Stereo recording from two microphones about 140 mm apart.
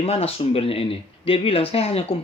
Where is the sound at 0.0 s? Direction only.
45° left (ahead or behind).